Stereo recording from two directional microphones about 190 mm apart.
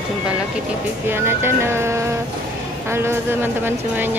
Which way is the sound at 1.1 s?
10° right (ahead or behind).